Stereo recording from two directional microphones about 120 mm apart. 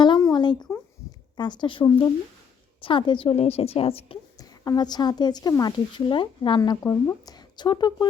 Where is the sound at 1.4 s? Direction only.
40° left (ahead or behind).